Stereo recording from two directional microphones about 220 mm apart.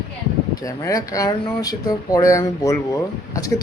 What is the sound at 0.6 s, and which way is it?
Speech, 15° left (ahead or behind).